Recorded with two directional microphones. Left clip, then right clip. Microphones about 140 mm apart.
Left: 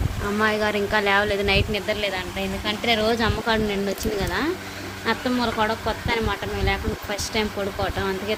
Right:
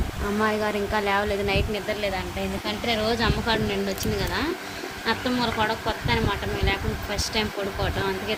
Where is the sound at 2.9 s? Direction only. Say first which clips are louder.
Left 2 dB; 15° left (ahead or behind).